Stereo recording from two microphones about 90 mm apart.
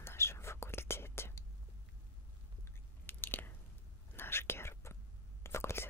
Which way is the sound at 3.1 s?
25° left (ahead or behind).